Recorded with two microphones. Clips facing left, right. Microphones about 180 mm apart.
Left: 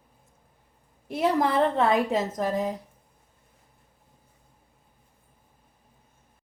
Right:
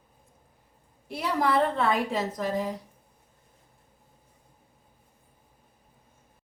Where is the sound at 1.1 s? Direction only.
45° left (ahead or behind).